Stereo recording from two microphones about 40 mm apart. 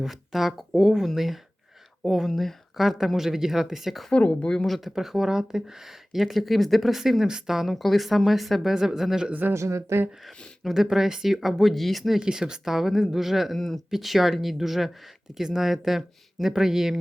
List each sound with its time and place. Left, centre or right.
0.0 s speech: centre
4.1 s speech: left
4.6 s speech: centre
4.9 s speech: centre
6.1 s speech: centre
7.7 s speech: centre
8.7 s speech: centre
9.5 s speech: right
10.6 s speech: centre
12.2 s speech: centre
13.6 s speech: centre
13.9 s speech: centre